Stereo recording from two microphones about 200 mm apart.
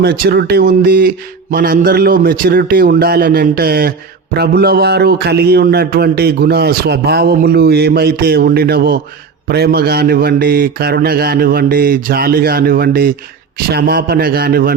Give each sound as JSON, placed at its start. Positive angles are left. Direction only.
{"t": 0.0, "sound": "speech", "side_deg": -55}